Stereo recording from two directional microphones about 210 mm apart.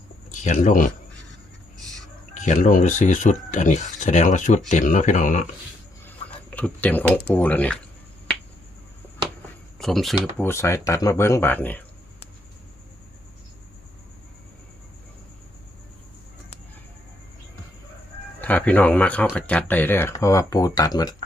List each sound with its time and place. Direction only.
0.3 s speech: 35° left (ahead or behind)
2.3 s speech: 35° left (ahead or behind)
6.1 s a sound: 5° left (ahead or behind)
7.3 s speech: 5° left (ahead or behind)
9.7 s speech: centre (ahead or behind)
10.3 s speech: 10° left (ahead or behind)
18.3 s speech: 10° left (ahead or behind)